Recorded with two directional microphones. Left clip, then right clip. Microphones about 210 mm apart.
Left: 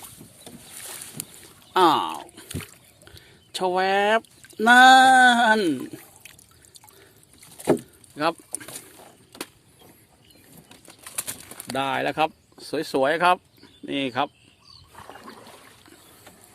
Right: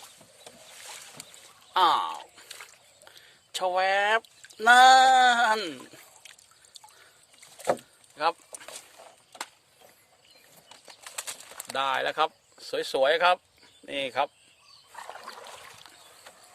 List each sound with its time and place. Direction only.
1.7 s a sound: 15° left (ahead or behind)
3.0 s speech: 5° left (ahead or behind)
8.1 s a sound: 15° left (ahead or behind)
11.0 s bird: centre (ahead or behind)
11.7 s speech: 5° left (ahead or behind)
14.9 s trickle: 40° right (ahead or behind)